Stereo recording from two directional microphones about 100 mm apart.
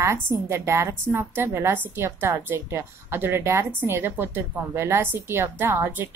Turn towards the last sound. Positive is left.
turn(degrees=-20)  # may be behind; listen again after turning